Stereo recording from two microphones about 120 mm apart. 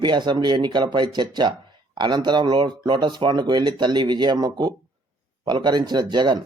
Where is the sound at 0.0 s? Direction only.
40° right (ahead or behind).